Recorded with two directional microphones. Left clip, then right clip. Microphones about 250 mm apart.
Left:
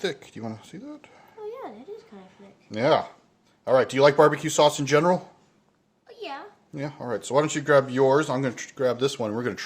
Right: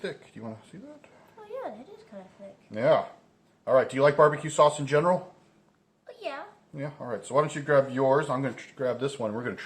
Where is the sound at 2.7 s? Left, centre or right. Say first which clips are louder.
Left 2 dB; left.